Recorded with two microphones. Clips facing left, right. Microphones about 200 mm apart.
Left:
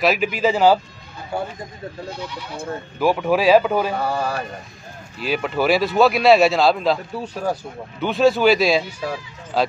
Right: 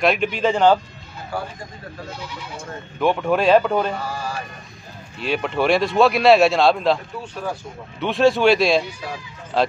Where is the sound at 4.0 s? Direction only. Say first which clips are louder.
Left 5 dB; 60° left (ahead or behind).